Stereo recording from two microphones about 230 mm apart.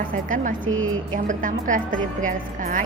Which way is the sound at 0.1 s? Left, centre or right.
Right.